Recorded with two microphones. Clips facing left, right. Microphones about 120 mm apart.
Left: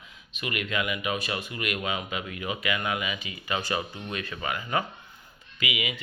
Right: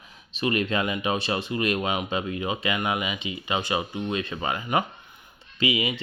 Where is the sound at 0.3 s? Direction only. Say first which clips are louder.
Right 6 dB; 30° right (ahead or behind).